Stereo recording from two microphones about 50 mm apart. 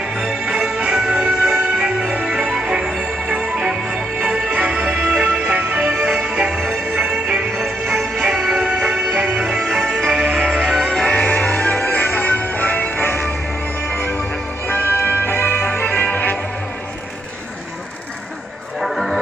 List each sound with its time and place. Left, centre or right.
0.2 s music: centre
7.6 s music: right
8.0 s music: centre
11.1 s music: left
13.8 s music: centre
14.7 s music: left
18.8 s music: centre